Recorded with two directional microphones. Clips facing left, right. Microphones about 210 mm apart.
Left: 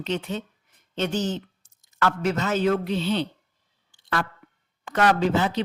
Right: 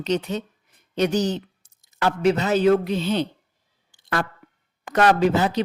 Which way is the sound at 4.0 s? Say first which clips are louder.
Right 2 dB; 40° right (ahead or behind).